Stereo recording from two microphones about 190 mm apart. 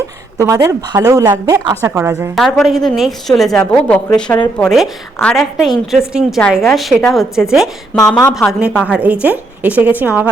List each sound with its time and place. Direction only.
0.3 s a woman's voice: 15° right (ahead or behind)
2.3 s a woman's voice: centre (ahead or behind)
4.1 s speech: 20° left (ahead or behind)
4.5 s a woman's voice: centre (ahead or behind)